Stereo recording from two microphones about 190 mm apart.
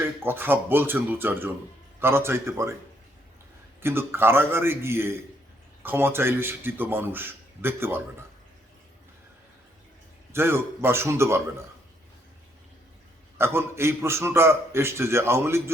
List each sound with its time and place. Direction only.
0.0 s a man's voice: 10° right (ahead or behind)
3.8 s a man's voice: 10° right (ahead or behind)
10.3 s a man's voice: 15° right (ahead or behind)
13.4 s a man's voice: 15° right (ahead or behind)